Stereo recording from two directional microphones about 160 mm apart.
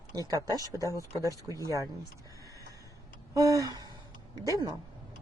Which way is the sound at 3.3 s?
20° right (ahead or behind).